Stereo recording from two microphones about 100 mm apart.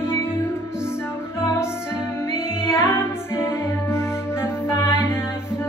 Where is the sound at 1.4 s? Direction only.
25° left (ahead or behind).